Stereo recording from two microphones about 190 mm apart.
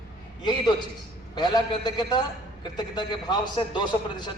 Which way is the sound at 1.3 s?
20° left (ahead or behind).